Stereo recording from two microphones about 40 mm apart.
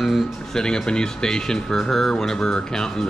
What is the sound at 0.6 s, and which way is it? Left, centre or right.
Speech, centre.